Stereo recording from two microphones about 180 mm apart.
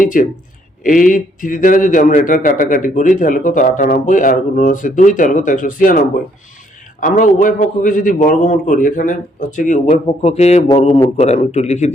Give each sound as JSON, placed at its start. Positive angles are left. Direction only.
{"t": 0.0, "sound": "a man's voice", "side_deg": 50}